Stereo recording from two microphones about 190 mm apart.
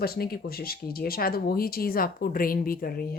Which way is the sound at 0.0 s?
55° left (ahead or behind).